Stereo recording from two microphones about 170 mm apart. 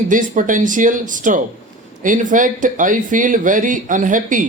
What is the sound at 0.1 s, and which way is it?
Speech, 50° right (ahead or behind).